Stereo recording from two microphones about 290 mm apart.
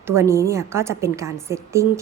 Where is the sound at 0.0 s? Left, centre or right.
Centre.